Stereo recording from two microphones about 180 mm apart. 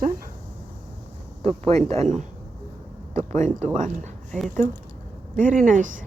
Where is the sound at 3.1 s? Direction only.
40° right (ahead or behind).